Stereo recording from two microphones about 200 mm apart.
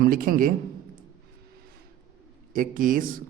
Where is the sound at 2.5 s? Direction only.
45° right (ahead or behind).